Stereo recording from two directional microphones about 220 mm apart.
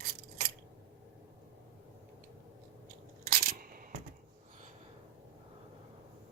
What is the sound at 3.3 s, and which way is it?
Coin, 40° right (ahead or behind).